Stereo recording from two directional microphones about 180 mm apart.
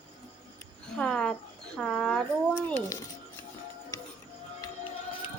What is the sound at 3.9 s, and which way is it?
Music, 20° left (ahead or behind).